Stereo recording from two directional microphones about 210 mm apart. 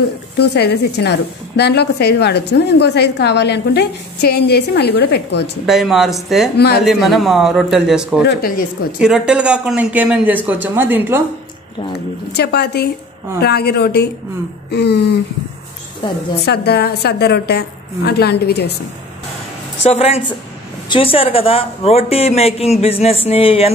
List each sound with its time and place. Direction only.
0.4 s a woman's voice: 50° left (ahead or behind)
5.7 s a man's voice: centre (ahead or behind)
8.3 s a woman's voice: 45° left (ahead or behind)
8.9 s speech: 5° right (ahead or behind)
12.3 s a woman's voice: 50° left (ahead or behind)
16.0 s speech: 20° left (ahead or behind)
16.4 s a woman's voice: 50° left (ahead or behind)
19.8 s speech: 30° left (ahead or behind)